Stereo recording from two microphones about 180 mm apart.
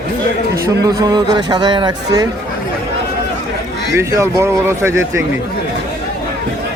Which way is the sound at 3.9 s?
15° right (ahead or behind).